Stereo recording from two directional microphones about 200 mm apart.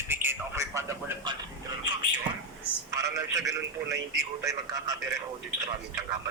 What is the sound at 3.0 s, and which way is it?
Speech, 15° right (ahead or behind).